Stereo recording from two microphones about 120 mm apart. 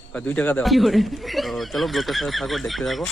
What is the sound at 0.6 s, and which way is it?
Speech, centre (ahead or behind).